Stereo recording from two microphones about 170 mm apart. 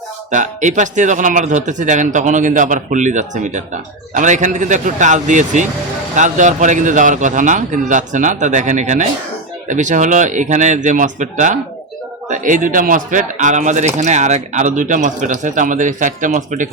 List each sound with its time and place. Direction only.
0.3 s speech: 45° right (ahead or behind)